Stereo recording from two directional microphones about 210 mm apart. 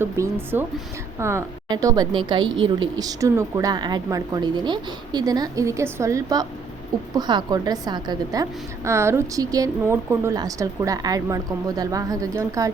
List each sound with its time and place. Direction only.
0.0 s a woman's voice: 10° right (ahead or behind)